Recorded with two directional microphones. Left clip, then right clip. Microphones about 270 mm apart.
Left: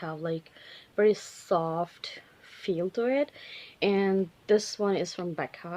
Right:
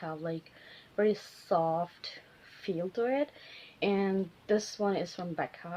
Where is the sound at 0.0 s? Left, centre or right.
Left.